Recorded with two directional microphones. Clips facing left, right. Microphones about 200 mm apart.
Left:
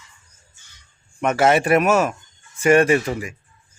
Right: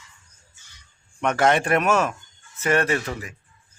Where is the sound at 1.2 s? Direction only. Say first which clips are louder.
Left 3 dB; 5° left (ahead or behind).